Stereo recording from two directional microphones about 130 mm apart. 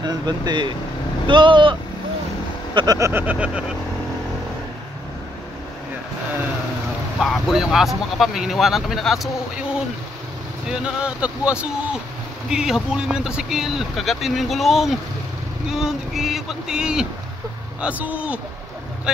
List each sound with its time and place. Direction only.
0.0 s speech: 35° right (ahead or behind)
3.0 s speech: 15° right (ahead or behind)
7.2 s speech: centre (ahead or behind)
10.7 s speech: 5° right (ahead or behind)